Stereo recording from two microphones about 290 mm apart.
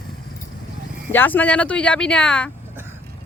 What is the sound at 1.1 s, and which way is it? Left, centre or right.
Speech, centre.